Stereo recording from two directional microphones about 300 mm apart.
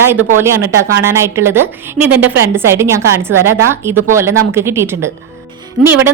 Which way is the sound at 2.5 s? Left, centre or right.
Centre.